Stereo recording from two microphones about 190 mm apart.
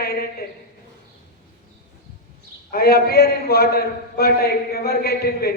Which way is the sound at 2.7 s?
55° left (ahead or behind).